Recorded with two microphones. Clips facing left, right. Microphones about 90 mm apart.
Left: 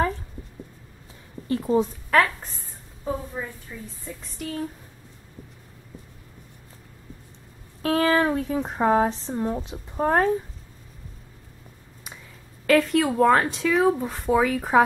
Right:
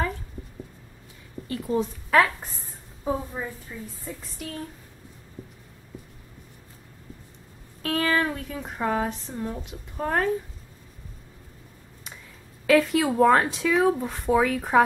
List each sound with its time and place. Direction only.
1.5 s speech: 30° left (ahead or behind)
2.0 s a woman's voice: 5° right (ahead or behind)
4.0 s speech: centre (ahead or behind)
7.8 s speech: 30° left (ahead or behind)
12.6 s speech: centre (ahead or behind)